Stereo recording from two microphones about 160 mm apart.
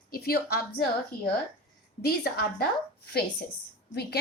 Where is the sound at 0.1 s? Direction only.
75° left (ahead or behind).